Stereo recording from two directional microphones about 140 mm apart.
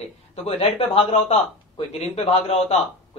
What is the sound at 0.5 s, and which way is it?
Speech, 45° left (ahead or behind).